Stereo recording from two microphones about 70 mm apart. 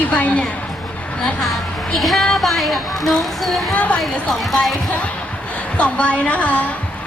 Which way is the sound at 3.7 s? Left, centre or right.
Centre.